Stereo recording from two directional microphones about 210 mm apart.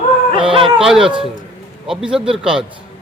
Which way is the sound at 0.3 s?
25° right (ahead or behind).